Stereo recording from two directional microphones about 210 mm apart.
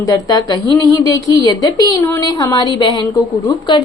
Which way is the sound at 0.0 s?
15° left (ahead or behind).